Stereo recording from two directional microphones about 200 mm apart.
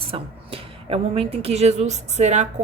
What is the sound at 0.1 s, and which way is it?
A woman's voice, 30° right (ahead or behind).